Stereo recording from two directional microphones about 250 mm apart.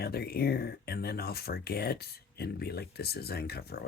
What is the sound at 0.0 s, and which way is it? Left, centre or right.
Speech, left.